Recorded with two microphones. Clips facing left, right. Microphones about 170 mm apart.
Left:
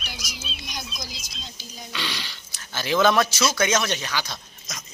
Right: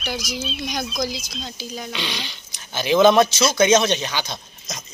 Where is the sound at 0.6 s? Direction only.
70° right (ahead or behind).